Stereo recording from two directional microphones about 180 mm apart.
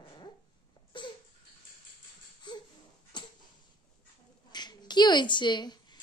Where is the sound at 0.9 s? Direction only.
25° left (ahead or behind).